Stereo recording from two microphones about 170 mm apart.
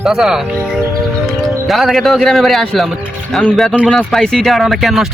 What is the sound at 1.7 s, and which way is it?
Speech, centre (ahead or behind).